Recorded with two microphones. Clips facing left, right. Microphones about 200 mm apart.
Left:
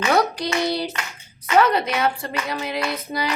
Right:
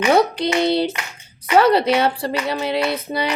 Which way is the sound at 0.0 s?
25° right (ahead or behind).